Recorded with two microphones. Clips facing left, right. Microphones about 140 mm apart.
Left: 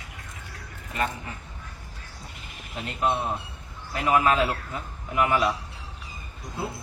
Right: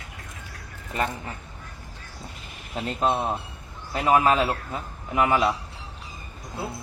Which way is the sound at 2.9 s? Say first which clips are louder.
Right 2 dB; 30° right (ahead or behind).